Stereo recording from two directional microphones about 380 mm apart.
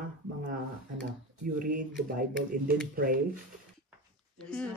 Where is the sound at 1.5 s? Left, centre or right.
Right.